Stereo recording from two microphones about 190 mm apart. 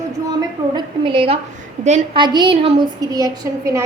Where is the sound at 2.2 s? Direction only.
25° right (ahead or behind).